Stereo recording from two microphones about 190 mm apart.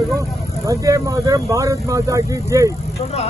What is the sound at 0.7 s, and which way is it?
Speech, 15° right (ahead or behind).